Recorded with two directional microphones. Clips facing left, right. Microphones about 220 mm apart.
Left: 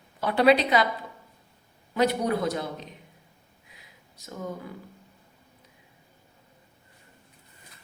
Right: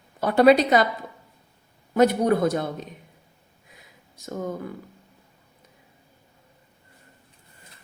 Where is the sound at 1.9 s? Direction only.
50° right (ahead or behind).